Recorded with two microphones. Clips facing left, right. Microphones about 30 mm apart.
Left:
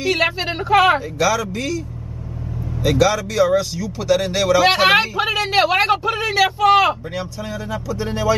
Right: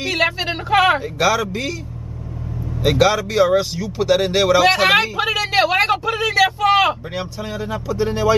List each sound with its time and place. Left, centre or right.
0.1 s speech: centre
1.1 s speech: centre
2.8 s speech: centre
4.7 s speech: centre
7.2 s speech: centre